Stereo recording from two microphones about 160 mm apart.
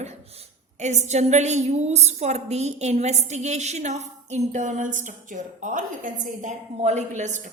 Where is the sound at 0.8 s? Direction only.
45° right (ahead or behind).